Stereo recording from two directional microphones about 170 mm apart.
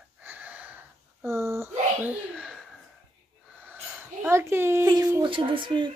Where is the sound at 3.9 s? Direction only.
15° right (ahead or behind).